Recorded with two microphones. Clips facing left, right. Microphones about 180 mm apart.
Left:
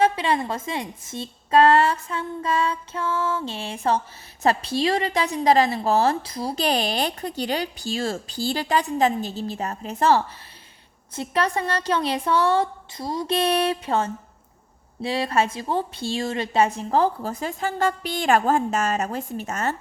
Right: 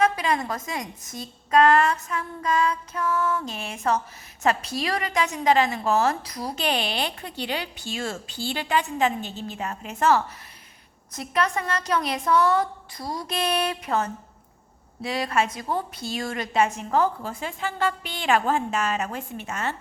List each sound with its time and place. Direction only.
0.0 s a woman's voice: 30° left (ahead or behind)